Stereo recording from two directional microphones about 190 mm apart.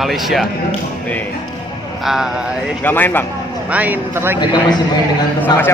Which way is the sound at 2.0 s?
Centre (ahead or behind).